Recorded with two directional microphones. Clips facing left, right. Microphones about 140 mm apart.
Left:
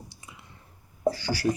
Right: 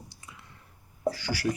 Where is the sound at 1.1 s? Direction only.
35° left (ahead or behind).